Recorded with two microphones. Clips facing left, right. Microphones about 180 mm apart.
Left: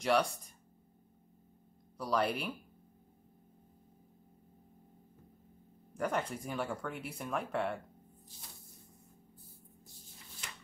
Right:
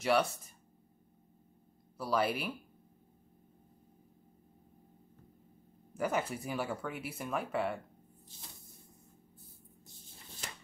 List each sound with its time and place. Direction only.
0.0 s speech: 5° right (ahead or behind)
2.0 s speech: 5° right (ahead or behind)
5.9 s speech: 5° right (ahead or behind)